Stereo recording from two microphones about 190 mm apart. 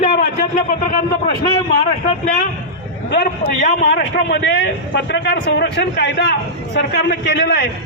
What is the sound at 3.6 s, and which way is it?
A man's voice, 50° left (ahead or behind).